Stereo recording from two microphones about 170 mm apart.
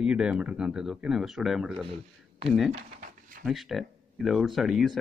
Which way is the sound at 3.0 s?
55° right (ahead or behind).